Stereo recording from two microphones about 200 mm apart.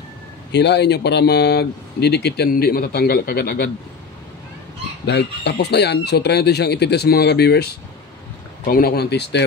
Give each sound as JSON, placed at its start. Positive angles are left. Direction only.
{"t": 0.5, "sound": "speech", "side_deg": 60}
{"t": 5.0, "sound": "speech", "side_deg": 60}